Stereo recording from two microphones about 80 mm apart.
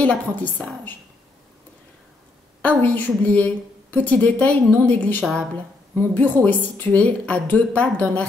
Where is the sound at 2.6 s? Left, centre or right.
Centre.